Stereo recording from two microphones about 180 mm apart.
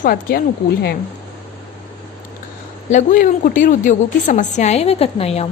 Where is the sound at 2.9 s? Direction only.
45° left (ahead or behind).